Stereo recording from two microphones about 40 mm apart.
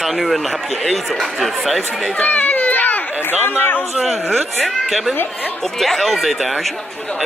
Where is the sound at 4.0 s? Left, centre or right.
Centre.